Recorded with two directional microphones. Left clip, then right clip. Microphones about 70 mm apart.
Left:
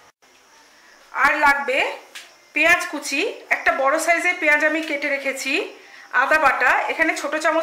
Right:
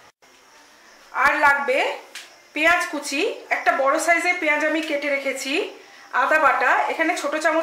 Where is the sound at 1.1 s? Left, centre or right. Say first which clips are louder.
Left 1 dB; left.